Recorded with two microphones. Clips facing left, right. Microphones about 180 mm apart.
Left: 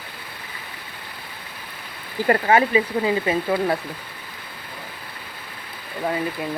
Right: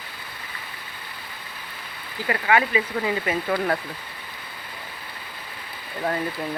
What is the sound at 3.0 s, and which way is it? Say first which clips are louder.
Speech: left 4 dB; 25° left (ahead or behind).